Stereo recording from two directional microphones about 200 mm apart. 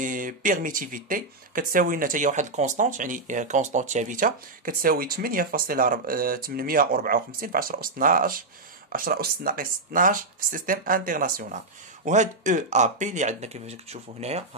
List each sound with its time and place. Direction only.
0.0 s speech: 40° right (ahead or behind)